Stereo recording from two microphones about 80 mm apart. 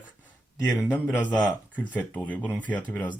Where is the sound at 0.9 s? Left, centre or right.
Left.